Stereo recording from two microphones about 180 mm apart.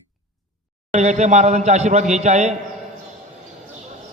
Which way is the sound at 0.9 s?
40° right (ahead or behind).